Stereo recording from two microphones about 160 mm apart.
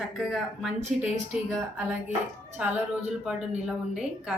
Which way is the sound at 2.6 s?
5° right (ahead or behind).